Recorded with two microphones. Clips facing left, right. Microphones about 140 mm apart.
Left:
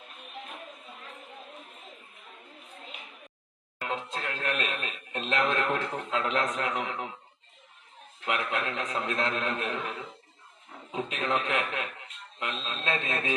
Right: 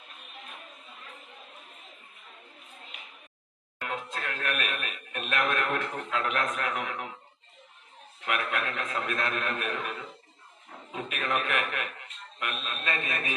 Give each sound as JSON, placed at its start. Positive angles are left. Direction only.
{"t": 3.8, "sound": "speech", "side_deg": 25}
{"t": 8.3, "sound": "speech", "side_deg": 25}